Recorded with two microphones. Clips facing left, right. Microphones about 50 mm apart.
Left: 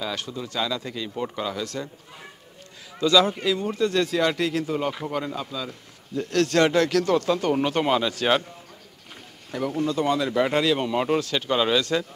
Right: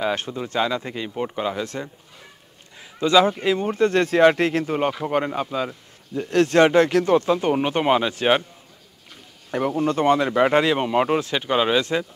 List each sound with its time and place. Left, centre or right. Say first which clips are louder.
0.0 s speech: right 6 dB; right
3.0 s speech: right 3 dB; right
6.1 s speech: right 4 dB; right
9.5 s speech: right 4 dB; right